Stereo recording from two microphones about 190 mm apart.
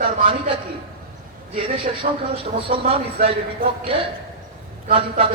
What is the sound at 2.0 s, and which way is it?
Speech, 40° right (ahead or behind).